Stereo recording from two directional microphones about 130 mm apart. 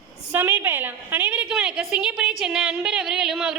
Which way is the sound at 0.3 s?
15° right (ahead or behind).